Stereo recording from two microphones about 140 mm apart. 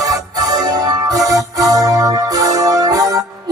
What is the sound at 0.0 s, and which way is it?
Music, 25° right (ahead or behind).